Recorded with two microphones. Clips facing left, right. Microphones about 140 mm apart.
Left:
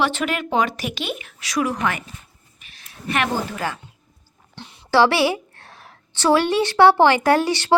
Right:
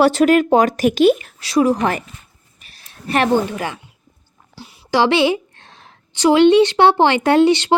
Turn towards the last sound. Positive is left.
turn(degrees=-20)  # may be behind; listen again after turning